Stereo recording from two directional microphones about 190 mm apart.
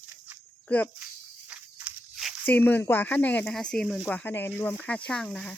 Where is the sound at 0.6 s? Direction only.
10° left (ahead or behind).